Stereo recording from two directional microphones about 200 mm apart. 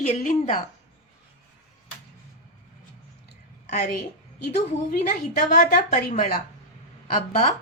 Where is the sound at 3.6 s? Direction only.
40° left (ahead or behind).